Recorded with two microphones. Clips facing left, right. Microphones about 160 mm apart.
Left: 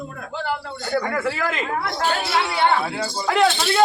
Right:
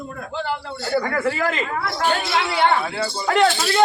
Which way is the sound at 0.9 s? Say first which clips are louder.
Right 2 dB; centre (ahead or behind).